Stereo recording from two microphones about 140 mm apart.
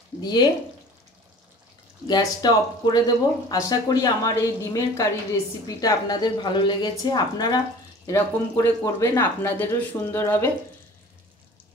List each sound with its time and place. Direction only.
0.2 s speech: 30° left (ahead or behind)
2.0 s speech: 30° left (ahead or behind)